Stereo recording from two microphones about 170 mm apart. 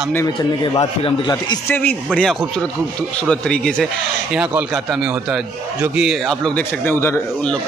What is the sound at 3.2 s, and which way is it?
A man's voice, 5° left (ahead or behind).